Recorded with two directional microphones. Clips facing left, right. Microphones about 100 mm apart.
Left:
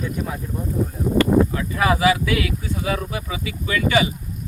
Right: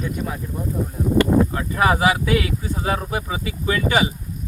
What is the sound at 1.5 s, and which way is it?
Speech, 40° right (ahead or behind).